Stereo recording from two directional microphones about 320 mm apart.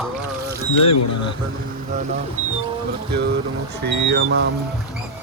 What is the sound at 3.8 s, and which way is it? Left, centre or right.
Speech, right.